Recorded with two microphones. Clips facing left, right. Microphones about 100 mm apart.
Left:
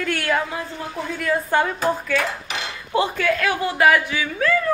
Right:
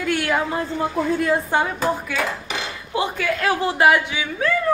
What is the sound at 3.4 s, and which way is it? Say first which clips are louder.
A woman's voice: right 3 dB; 30° right (ahead or behind).